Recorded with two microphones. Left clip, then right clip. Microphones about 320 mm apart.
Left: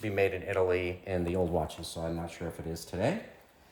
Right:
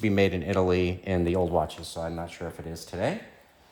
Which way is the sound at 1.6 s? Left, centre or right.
Centre.